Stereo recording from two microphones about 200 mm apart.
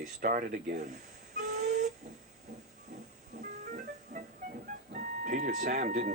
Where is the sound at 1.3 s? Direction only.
35° right (ahead or behind).